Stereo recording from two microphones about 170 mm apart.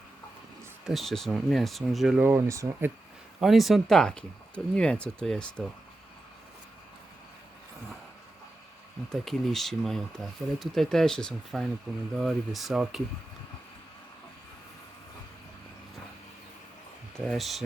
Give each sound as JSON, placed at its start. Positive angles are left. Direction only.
{"t": 0.9, "sound": "speech", "side_deg": 0}
{"t": 2.2, "sound": "speech", "side_deg": -15}
{"t": 3.4, "sound": "speech", "side_deg": 0}
{"t": 9.2, "sound": "speech", "side_deg": 0}
{"t": 17.2, "sound": "speech", "side_deg": 0}